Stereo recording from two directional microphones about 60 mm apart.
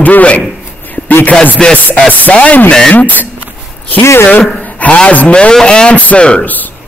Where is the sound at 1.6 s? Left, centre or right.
Centre; by 3.2 s left.